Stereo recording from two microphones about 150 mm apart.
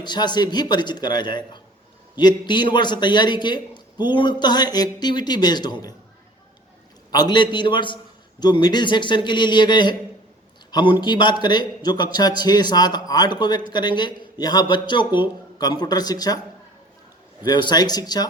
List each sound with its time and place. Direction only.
0.0 s a man's voice: 30° left (ahead or behind)
7.1 s a man's voice: 30° left (ahead or behind)
17.4 s a man's voice: 30° left (ahead or behind)